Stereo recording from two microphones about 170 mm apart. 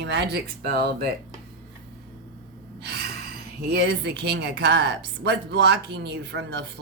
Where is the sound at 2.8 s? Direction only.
70° right (ahead or behind).